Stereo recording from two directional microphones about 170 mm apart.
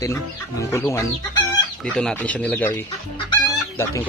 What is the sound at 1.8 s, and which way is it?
Speech, 5° left (ahead or behind).